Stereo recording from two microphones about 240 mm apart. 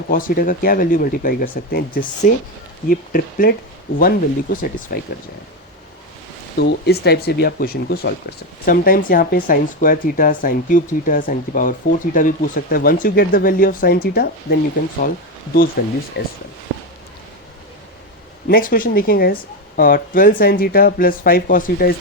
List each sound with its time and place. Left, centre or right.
0.1 s speech: left
6.6 s speech: left
15.8 s speech: left
18.4 s speech: left